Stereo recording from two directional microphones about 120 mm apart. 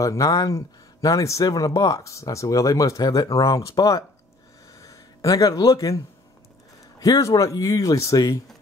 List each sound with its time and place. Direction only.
0.0 s speech: 30° left (ahead or behind)
4.7 s a sound: 30° left (ahead or behind)
7.0 s speech: 25° left (ahead or behind)